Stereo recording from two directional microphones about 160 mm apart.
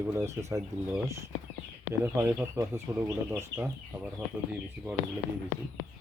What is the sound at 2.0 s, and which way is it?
Speech, 15° right (ahead or behind).